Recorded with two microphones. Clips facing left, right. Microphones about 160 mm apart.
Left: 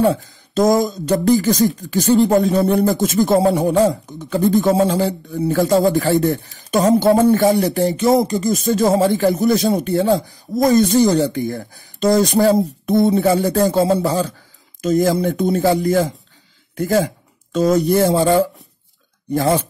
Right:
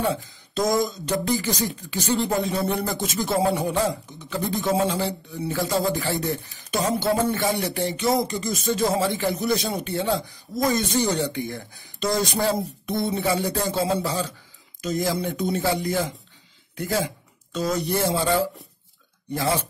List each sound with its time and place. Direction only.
0.1 s speech: 50° left (ahead or behind)